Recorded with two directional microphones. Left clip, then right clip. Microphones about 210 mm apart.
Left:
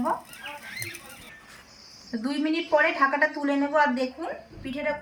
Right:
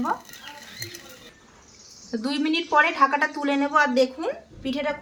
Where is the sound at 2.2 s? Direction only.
15° right (ahead or behind).